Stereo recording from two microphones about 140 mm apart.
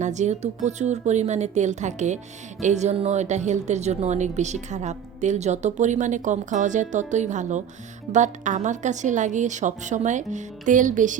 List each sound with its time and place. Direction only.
0.0 s speech: 55° right (ahead or behind)